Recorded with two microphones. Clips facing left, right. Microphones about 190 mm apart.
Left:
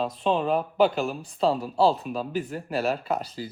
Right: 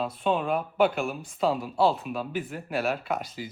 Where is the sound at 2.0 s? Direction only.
5° right (ahead or behind).